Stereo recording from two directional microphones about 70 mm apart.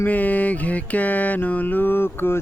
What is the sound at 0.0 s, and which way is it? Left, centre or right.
Music, left.